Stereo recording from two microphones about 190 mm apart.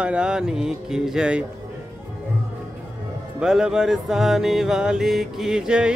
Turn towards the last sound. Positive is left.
turn(degrees=-5)  # may be behind; listen again after turning